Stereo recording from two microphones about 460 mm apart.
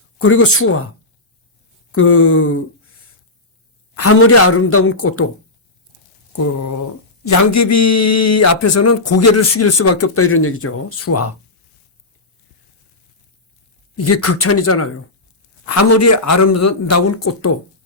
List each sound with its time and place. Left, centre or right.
0.2 s speech: left
1.9 s speech: left
3.9 s speech: left
6.3 s speech: left
13.9 s speech: left